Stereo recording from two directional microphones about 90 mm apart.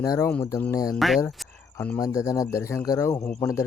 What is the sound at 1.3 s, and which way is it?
Cricket, centre (ahead or behind).